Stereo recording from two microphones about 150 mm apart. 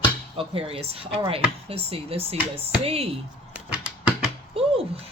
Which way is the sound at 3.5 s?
10° right (ahead or behind).